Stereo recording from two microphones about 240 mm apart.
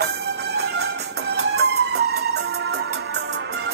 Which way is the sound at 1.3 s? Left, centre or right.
Right.